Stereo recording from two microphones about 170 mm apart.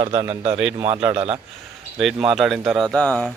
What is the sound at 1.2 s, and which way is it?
Speech, 35° right (ahead or behind).